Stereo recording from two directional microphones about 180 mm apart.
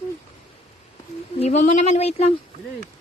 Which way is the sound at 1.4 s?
40° left (ahead or behind).